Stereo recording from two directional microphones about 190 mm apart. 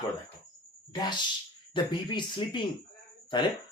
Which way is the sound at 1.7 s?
25° left (ahead or behind).